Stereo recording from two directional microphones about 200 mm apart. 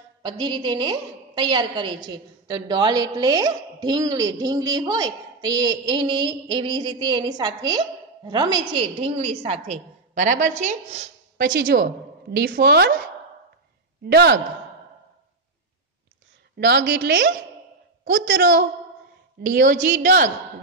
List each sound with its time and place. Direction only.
0.2 s a woman's voice: 25° right (ahead or behind)
11.3 s a woman's voice: 50° right (ahead or behind)
14.0 s a woman's voice: 55° right (ahead or behind)
16.5 s a woman's voice: 55° right (ahead or behind)
19.4 s a woman's voice: 45° right (ahead or behind)